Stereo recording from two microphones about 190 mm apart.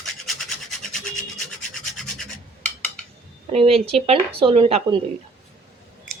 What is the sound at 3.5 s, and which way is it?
A woman's voice, 30° right (ahead or behind).